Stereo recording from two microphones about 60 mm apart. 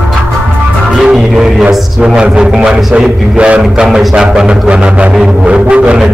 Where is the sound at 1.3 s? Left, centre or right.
Centre.